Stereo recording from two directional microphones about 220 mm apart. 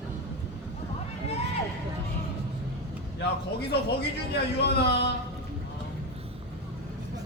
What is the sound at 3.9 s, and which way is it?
A man's voice, 50° left (ahead or behind).